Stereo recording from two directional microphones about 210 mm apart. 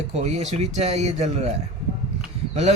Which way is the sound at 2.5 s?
30° right (ahead or behind).